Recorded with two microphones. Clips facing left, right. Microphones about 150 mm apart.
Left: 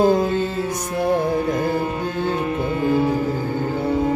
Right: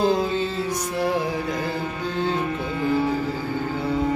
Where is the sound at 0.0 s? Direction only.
50° left (ahead or behind).